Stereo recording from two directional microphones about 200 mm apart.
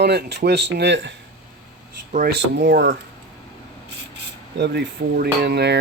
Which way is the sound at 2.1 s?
55° right (ahead or behind).